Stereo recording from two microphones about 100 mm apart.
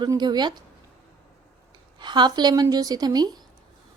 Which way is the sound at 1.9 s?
50° right (ahead or behind).